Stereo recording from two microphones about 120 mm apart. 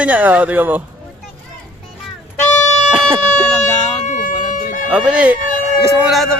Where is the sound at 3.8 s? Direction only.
75° left (ahead or behind); by 4.9 s 90° left.